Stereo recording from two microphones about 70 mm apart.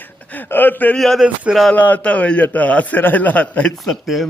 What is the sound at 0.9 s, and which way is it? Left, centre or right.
Speech, centre.